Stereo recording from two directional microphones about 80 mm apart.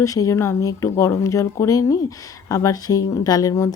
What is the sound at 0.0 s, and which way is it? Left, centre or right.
Speech, left.